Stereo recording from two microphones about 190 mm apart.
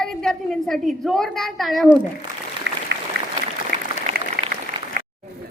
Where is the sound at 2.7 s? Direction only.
75° right (ahead or behind).